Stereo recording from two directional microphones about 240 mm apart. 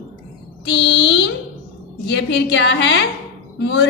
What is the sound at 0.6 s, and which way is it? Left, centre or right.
A woman's voice, left.